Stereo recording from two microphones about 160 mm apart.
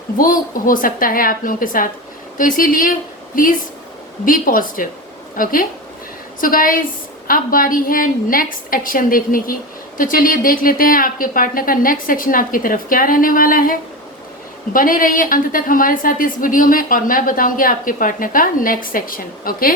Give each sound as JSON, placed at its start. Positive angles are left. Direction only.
{"t": 0.2, "sound": "a woman's voice", "side_deg": 60}